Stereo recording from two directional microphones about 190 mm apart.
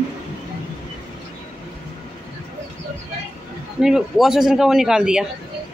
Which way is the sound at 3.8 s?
5° right (ahead or behind).